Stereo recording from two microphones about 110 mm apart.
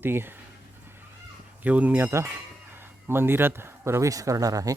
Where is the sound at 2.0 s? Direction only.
25° right (ahead or behind).